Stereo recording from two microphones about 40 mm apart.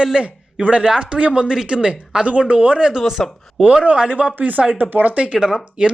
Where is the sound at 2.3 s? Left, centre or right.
Right.